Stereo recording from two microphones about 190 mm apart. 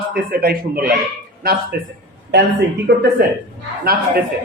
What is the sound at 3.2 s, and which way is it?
Speech, 55° right (ahead or behind).